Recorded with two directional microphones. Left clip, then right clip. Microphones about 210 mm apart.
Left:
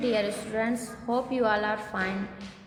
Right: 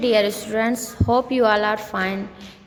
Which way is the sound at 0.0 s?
55° right (ahead or behind).